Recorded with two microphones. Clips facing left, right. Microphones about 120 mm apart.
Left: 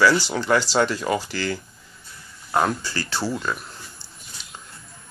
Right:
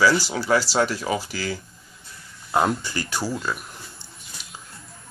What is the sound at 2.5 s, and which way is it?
Speech, 20° right (ahead or behind).